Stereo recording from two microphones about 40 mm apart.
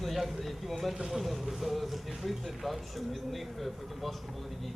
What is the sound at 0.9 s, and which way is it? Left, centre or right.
Speech, centre.